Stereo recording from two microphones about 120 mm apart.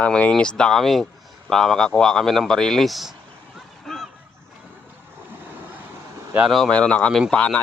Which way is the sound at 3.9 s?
5° left (ahead or behind).